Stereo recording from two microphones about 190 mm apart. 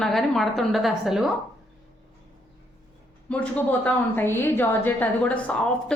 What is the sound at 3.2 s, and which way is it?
A woman's voice, 5° left (ahead or behind).